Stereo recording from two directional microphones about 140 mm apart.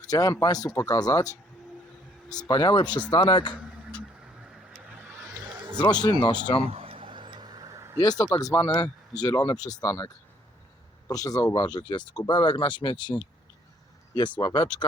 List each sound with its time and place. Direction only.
0.1 s speech: 25° left (ahead or behind)
2.3 s speech: 30° left (ahead or behind)
4.9 s vehicle: 10° right (ahead or behind)
5.7 s speech: 30° left (ahead or behind)
6.7 s vehicle: 45° right (ahead or behind); by 7.9 s 25° right (ahead or behind)
7.9 s speech: 30° left (ahead or behind)
11.1 s speech: 25° left (ahead or behind)
14.3 s speech: 30° left (ahead or behind)